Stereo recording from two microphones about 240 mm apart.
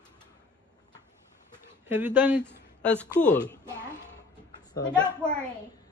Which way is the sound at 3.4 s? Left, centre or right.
Centre.